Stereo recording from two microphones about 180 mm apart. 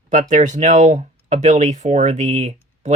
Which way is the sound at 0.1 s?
45° right (ahead or behind).